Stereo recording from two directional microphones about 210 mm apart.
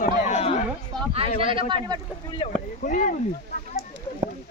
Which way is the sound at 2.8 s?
40° left (ahead or behind).